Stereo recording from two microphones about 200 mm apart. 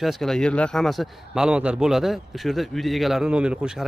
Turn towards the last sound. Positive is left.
turn(degrees=-5)  # may be behind; listen again after turning